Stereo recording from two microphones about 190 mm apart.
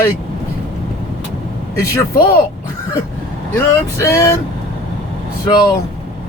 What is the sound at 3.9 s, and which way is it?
Speech, 15° left (ahead or behind).